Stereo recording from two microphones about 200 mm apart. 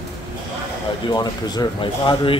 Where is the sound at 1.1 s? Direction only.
20° left (ahead or behind).